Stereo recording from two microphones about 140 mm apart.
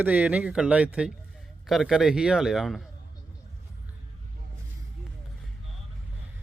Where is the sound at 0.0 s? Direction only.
10° right (ahead or behind).